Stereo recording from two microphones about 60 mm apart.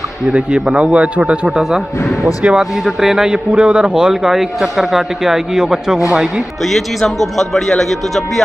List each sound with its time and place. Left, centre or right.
0.3 s a man's voice: centre
3.3 s a man's voice: centre
6.6 s speech: centre